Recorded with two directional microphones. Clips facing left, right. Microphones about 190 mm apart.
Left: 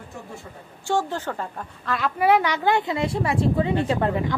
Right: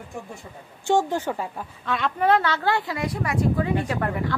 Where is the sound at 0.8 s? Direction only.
15° right (ahead or behind).